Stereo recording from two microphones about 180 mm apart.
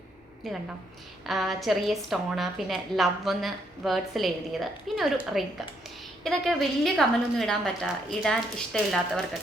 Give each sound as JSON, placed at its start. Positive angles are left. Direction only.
{"t": 1.3, "sound": "a woman's voice", "side_deg": 0}